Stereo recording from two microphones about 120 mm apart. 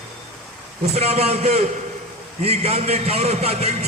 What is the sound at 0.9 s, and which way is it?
A man's voice, 60° right (ahead or behind).